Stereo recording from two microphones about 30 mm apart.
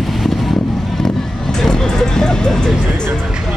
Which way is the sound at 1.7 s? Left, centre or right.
Left.